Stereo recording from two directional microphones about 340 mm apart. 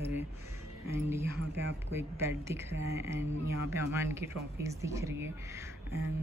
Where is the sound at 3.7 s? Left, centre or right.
Centre.